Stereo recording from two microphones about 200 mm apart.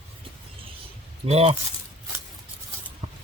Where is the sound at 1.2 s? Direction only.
30° right (ahead or behind).